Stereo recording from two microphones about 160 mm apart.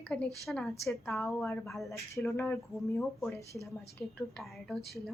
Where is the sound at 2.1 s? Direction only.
15° left (ahead or behind).